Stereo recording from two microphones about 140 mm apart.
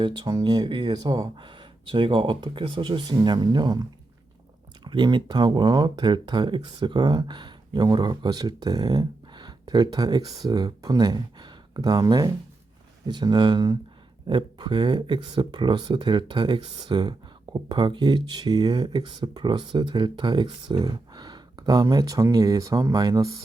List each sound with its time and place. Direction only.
0.0 s speech: 30° right (ahead or behind)